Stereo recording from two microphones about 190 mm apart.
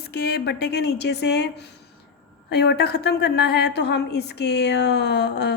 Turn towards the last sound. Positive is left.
turn(degrees=60)  # may be behind; listen again after turning